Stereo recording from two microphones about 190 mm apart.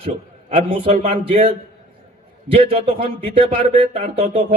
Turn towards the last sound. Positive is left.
turn(degrees=-30)  # may be behind; listen again after turning